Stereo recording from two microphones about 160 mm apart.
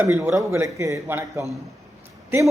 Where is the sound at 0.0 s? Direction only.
15° right (ahead or behind).